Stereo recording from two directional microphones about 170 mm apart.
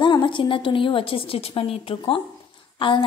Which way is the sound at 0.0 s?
30° left (ahead or behind).